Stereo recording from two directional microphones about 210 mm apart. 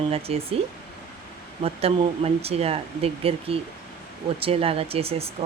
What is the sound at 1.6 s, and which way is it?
Speech, 30° right (ahead or behind).